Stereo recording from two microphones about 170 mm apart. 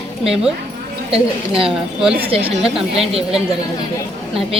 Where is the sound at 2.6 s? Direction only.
Centre (ahead or behind).